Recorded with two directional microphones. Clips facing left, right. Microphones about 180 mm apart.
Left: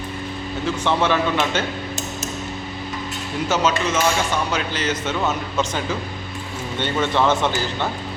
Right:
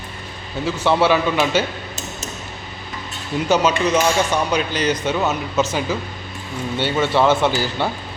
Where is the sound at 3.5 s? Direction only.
15° right (ahead or behind).